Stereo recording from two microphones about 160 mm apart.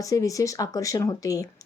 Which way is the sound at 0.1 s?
20° left (ahead or behind).